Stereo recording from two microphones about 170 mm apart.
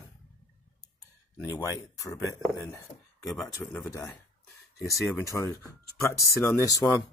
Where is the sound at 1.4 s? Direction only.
15° left (ahead or behind).